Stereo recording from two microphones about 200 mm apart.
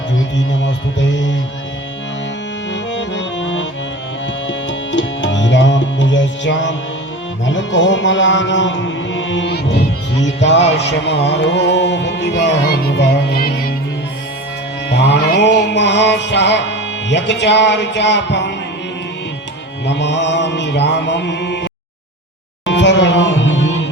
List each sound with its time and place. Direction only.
0.3 s music: 65° left (ahead or behind)
2.9 s music: 65° left (ahead or behind)
14.8 s music: 60° left (ahead or behind)
19.8 s music: 60° left (ahead or behind)